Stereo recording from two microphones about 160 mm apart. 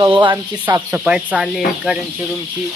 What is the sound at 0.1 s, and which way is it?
Speech, 30° right (ahead or behind).